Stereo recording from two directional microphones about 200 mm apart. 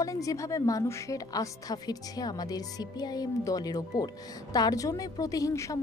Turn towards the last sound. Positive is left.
turn(degrees=15)  # may be behind; listen again after turning